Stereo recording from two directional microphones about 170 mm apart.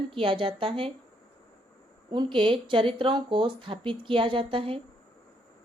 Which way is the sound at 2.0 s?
30° right (ahead or behind).